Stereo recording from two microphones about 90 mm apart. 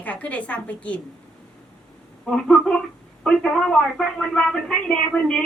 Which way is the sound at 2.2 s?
10° left (ahead or behind).